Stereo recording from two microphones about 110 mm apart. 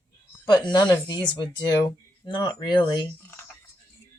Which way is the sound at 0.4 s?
40° left (ahead or behind).